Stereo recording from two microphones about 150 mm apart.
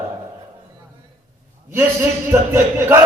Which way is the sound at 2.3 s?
20° right (ahead or behind).